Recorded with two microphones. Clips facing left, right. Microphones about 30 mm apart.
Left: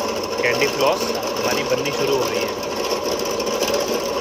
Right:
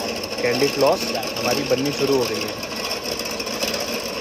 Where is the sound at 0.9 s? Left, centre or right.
Right.